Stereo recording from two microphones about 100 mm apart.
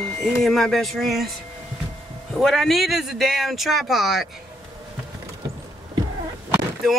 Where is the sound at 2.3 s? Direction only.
5° left (ahead or behind).